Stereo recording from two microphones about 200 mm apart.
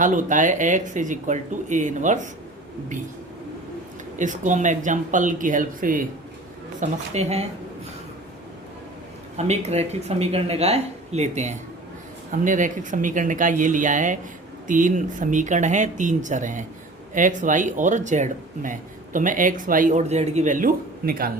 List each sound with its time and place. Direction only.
0.0 s speech: 40° right (ahead or behind)
4.2 s speech: 40° right (ahead or behind)
9.4 s speech: 35° right (ahead or behind)